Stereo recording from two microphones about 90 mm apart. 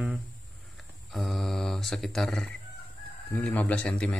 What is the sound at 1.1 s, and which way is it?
A man's voice, centre (ahead or behind).